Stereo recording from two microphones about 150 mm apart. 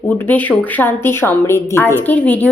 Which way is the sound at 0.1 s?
10° left (ahead or behind).